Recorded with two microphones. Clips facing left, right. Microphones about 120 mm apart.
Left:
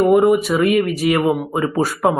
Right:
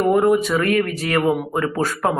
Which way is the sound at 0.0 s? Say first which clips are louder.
Left 3 dB; 5° left (ahead or behind).